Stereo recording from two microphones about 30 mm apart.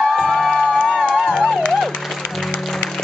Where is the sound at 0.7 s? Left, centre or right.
Left.